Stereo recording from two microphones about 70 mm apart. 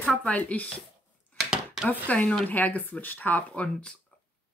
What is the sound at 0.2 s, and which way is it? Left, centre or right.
Speech, centre.